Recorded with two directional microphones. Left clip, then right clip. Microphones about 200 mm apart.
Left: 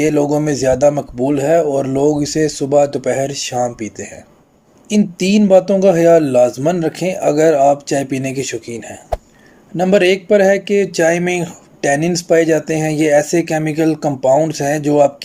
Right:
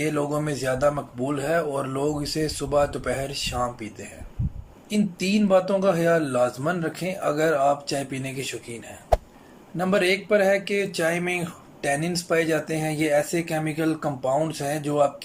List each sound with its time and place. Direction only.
0.0 s speech: 35° left (ahead or behind)
9.1 s a sound: centre (ahead or behind)
9.7 s speech: 35° left (ahead or behind)